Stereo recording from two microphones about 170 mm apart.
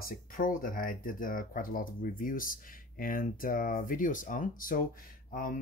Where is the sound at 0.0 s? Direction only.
55° left (ahead or behind).